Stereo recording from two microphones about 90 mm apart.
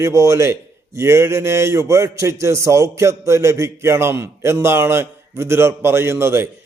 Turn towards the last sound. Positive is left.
turn(degrees=-25)  # may be behind; listen again after turning